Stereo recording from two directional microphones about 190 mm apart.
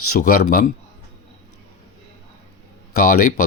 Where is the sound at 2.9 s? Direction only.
50° left (ahead or behind).